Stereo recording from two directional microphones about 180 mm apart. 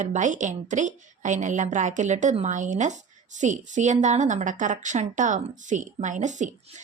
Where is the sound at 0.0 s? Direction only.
40° right (ahead or behind).